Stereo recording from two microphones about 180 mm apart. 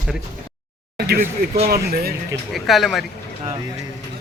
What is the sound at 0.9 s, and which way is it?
Speech, 60° right (ahead or behind).